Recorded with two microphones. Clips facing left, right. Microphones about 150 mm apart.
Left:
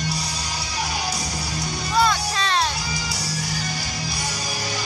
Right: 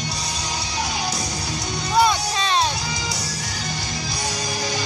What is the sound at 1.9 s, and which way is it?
Music, 15° right (ahead or behind).